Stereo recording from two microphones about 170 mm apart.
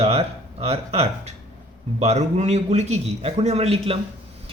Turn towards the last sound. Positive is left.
turn(degrees=-35)  # may be behind; listen again after turning